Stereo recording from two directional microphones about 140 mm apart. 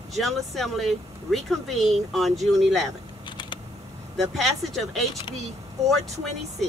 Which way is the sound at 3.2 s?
35° left (ahead or behind).